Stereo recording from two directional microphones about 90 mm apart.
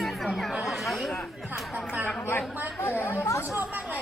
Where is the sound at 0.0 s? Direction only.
Centre (ahead or behind).